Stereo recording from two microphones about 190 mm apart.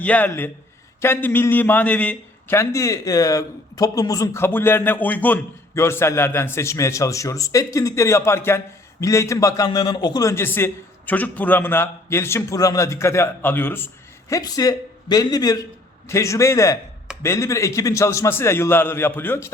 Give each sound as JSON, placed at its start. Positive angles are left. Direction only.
{"t": 0.0, "sound": "a man's voice", "side_deg": 10}